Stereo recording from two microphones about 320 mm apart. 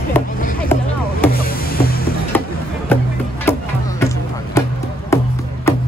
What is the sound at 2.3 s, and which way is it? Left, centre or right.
Music, centre.